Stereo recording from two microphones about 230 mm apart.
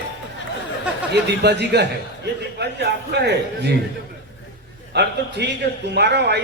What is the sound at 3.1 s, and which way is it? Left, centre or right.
Speech, right.